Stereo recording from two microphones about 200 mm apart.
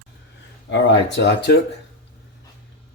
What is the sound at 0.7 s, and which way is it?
Speech, 65° left (ahead or behind).